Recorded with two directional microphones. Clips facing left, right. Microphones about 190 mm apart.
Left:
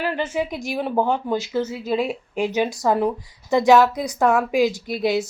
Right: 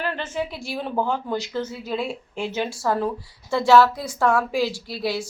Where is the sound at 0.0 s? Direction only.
10° left (ahead or behind).